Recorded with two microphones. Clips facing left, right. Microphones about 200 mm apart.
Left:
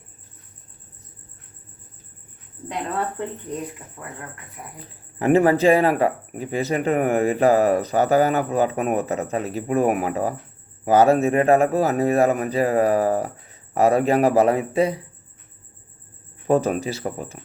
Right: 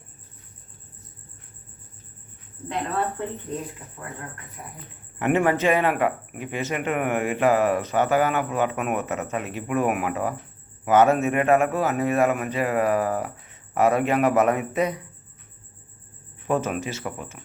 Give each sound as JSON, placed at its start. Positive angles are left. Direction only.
{"t": 5.2, "sound": "speech", "side_deg": 35}
{"t": 16.5, "sound": "speech", "side_deg": 35}